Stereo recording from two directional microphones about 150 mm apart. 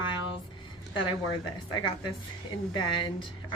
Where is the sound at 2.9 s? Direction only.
30° left (ahead or behind).